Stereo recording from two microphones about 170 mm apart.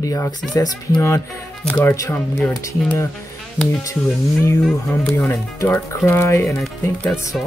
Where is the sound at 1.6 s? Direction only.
5° left (ahead or behind).